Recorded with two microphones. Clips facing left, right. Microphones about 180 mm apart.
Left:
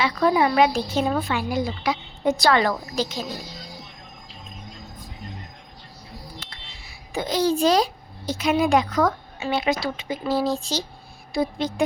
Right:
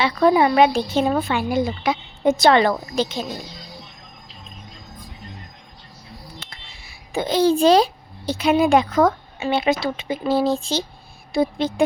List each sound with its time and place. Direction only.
0.0 s a woman's voice: 30° right (ahead or behind)
6.4 s a sound: 25° right (ahead or behind)
7.1 s a woman's voice: 25° right (ahead or behind)